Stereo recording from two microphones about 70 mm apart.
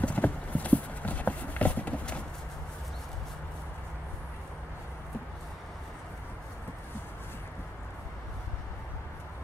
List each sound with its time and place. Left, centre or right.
0.0 s clip-clop: left